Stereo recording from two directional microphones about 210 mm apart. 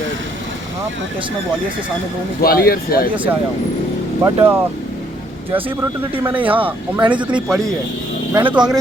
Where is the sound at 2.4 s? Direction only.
45° left (ahead or behind).